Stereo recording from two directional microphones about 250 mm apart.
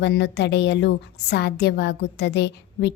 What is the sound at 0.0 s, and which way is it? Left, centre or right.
A woman's voice, left.